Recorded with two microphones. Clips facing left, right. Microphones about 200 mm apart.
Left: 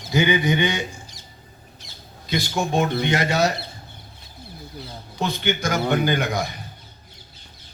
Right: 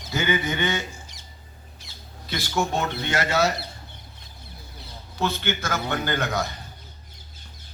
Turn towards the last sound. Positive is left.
turn(degrees=15)  # may be behind; listen again after turning